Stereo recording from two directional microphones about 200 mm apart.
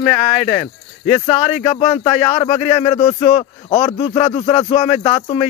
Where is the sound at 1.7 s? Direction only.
35° left (ahead or behind).